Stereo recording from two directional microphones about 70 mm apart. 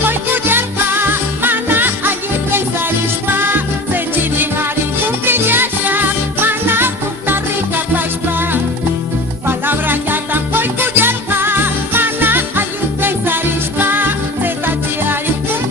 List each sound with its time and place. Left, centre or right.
0.0 s music: right
9.5 s music: right